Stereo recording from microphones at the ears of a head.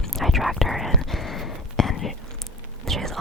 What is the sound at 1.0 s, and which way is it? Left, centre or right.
Whispering, left.